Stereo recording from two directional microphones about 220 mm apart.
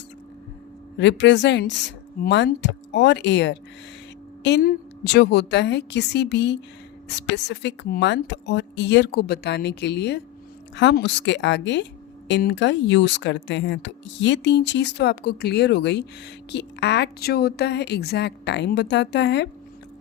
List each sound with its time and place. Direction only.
0.9 s speech: 55° left (ahead or behind)